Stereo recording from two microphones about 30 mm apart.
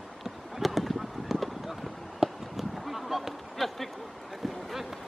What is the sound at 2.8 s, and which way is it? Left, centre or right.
Honk, centre.